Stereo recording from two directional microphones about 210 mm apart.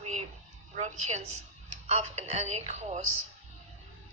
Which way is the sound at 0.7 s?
35° right (ahead or behind).